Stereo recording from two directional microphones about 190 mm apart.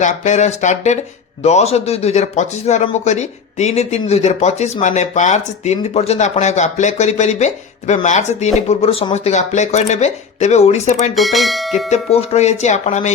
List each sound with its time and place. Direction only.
0.0 s speech: 40° left (ahead or behind)
11.1 s speech: centre (ahead or behind)
11.9 s speech: 35° left (ahead or behind)